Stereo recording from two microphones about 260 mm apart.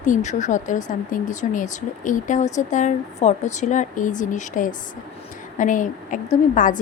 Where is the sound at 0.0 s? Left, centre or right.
Left.